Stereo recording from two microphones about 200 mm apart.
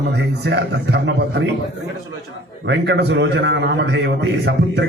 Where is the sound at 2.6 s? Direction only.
60° right (ahead or behind).